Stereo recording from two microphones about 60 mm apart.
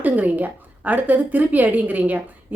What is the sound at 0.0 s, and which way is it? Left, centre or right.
A woman's voice, right.